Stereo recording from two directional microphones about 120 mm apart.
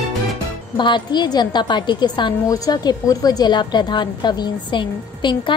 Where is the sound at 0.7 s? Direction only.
40° left (ahead or behind).